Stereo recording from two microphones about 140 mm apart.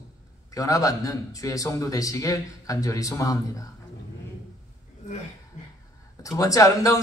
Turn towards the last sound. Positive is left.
turn(degrees=25)  # may be behind; listen again after turning